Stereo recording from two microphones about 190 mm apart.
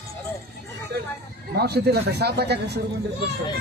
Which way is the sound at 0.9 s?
60° right (ahead or behind).